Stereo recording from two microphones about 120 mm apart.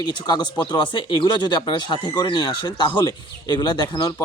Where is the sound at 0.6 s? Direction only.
40° left (ahead or behind).